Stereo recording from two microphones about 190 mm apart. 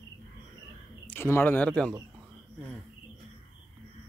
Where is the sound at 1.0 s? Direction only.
10° left (ahead or behind).